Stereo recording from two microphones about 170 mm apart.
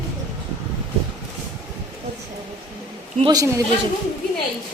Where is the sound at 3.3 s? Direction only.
20° right (ahead or behind).